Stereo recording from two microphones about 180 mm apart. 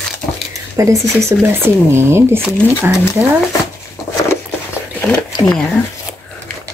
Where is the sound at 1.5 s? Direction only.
15° right (ahead or behind).